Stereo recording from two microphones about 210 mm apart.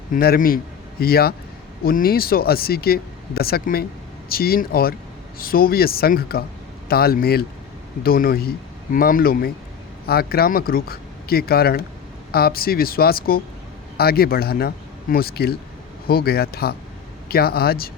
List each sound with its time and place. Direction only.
0.1 s a man's voice: 45° left (ahead or behind)